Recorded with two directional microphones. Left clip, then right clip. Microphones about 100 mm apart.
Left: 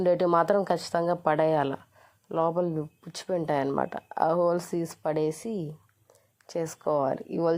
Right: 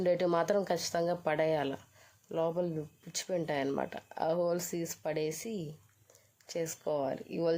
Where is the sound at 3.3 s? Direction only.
15° left (ahead or behind).